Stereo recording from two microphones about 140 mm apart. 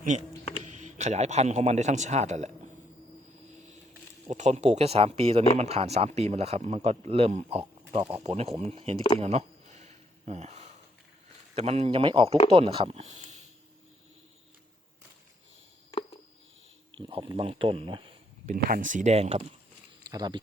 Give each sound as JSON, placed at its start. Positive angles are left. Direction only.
{"t": 0.1, "sound": "a man's voice", "side_deg": -60}
{"t": 4.3, "sound": "speech", "side_deg": -55}
{"t": 9.1, "sound": "a sound", "side_deg": -50}
{"t": 11.5, "sound": "speech", "side_deg": -45}
{"t": 17.2, "sound": "speech", "side_deg": -35}
{"t": 18.4, "sound": "speech", "side_deg": -80}
{"t": 20.1, "sound": "speech", "side_deg": -30}